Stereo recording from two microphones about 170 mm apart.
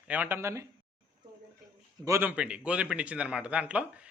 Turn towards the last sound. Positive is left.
turn(degrees=-10)  # may be behind; listen again after turning